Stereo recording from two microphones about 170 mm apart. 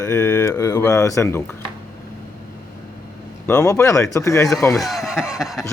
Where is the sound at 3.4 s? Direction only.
15° left (ahead or behind).